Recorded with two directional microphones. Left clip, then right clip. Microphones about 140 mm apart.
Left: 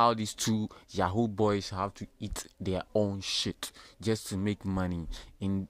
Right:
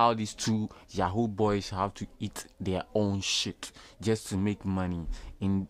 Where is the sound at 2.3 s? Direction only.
25° left (ahead or behind).